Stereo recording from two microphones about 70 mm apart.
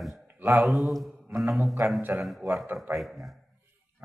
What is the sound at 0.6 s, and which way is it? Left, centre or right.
Mantra, centre.